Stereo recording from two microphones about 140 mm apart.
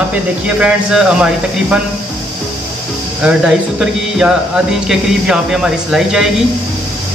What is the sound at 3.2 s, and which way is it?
Speech, 5° right (ahead or behind).